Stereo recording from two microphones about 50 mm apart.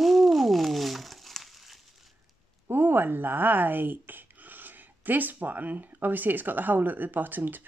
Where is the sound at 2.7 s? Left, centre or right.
Right.